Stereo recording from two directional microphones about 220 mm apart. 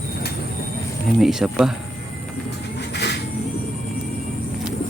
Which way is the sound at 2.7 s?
50° left (ahead or behind).